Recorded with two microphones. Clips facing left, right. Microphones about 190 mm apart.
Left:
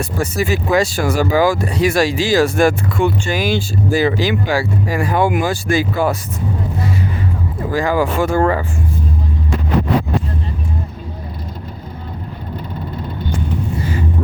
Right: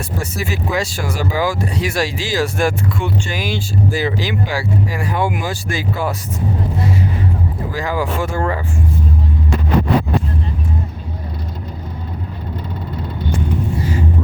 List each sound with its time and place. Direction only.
0.3 s speech: 50° left (ahead or behind)
7.7 s speech: 50° left (ahead or behind)
8.3 s speech: 75° left (ahead or behind)